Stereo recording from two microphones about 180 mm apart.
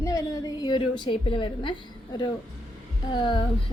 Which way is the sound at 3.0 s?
25° left (ahead or behind).